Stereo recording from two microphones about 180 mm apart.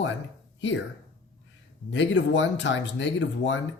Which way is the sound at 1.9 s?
90° left.